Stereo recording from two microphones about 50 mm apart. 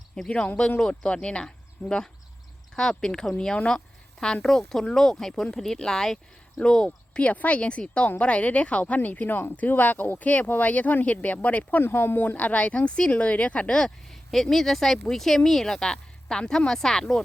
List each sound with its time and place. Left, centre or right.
0.3 s speech: left
11.8 s speech: left; by 13.9 s centre
14.1 s speech: centre